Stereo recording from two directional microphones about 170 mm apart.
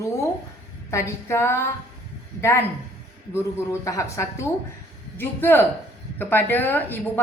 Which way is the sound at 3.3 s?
15° left (ahead or behind).